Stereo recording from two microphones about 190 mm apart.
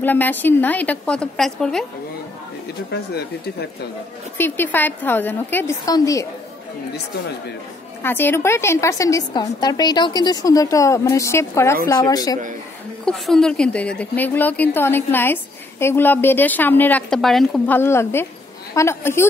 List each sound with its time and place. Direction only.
0.0 s a woman's voice: 10° left (ahead or behind)
2.9 s speech: 60° left (ahead or behind)
4.4 s a woman's voice: 10° left (ahead or behind)
8.0 s a woman's voice: 10° left (ahead or behind)
13.0 s a woman's voice: 5° left (ahead or behind)
17.7 s a woman's voice: 15° left (ahead or behind)